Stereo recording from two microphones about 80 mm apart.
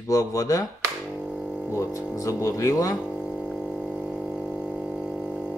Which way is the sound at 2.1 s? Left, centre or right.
Left.